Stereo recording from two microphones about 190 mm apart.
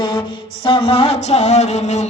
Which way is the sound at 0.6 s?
30° left (ahead or behind).